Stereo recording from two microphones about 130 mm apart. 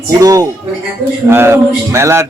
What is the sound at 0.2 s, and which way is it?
A man's voice, 25° right (ahead or behind).